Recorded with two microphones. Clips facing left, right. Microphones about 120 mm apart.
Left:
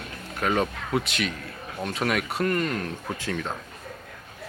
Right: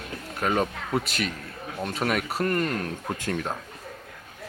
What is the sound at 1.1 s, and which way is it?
Speech, 35° right (ahead or behind).